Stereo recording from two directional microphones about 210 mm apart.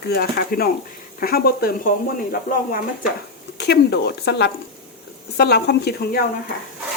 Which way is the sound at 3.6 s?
55° left (ahead or behind).